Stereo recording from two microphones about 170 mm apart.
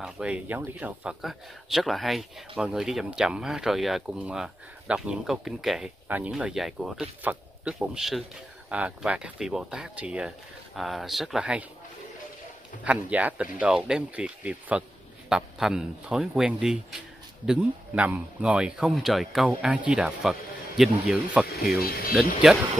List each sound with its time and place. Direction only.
0.0 s speech: 5° right (ahead or behind)
12.8 s speech: 10° right (ahead or behind)